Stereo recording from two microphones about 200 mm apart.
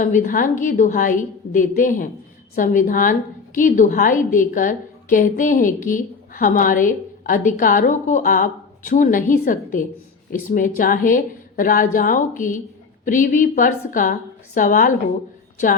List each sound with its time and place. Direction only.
0.0 s a woman's voice: 40° left (ahead or behind)